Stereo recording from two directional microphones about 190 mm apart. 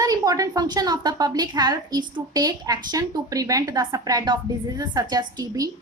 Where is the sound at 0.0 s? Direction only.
20° right (ahead or behind).